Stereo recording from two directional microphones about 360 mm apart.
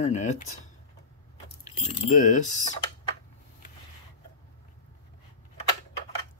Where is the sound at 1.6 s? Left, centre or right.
Centre.